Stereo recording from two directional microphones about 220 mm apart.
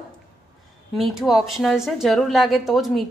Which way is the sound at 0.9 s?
Centre (ahead or behind).